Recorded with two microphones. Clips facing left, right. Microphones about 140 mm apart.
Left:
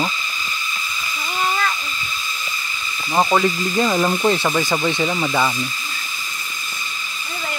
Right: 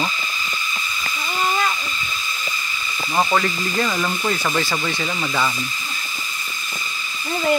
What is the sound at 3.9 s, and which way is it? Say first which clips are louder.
Speech: left 5 dB; 30° left (ahead or behind).